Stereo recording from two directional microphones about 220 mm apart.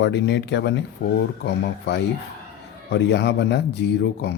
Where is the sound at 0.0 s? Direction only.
50° left (ahead or behind).